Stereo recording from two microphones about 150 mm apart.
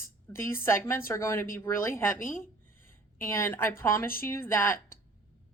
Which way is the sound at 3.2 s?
20° left (ahead or behind).